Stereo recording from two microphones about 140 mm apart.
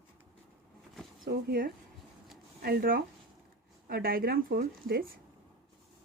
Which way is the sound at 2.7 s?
90° right.